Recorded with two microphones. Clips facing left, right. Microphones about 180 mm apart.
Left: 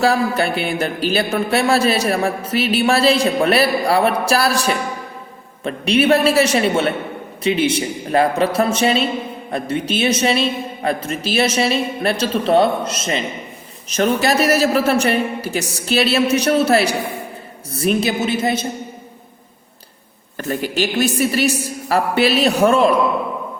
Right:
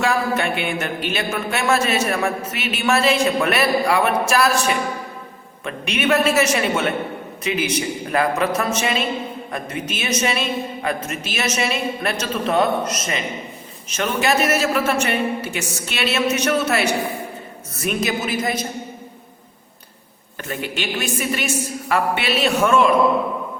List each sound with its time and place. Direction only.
0.0 s a woman's voice: 35° left (ahead or behind)
20.5 s speech: 40° left (ahead or behind)